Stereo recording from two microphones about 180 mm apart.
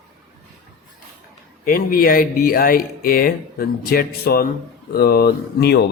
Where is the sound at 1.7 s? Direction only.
55° left (ahead or behind).